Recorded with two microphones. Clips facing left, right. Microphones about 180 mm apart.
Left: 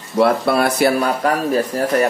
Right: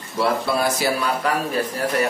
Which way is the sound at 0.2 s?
60° left (ahead or behind).